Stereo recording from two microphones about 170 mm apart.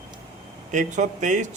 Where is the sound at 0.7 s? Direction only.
45° right (ahead or behind).